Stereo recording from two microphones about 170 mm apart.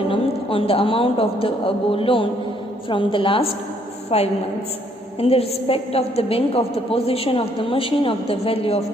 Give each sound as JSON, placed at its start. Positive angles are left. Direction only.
{"t": 0.1, "sound": "a woman's voice", "side_deg": 35}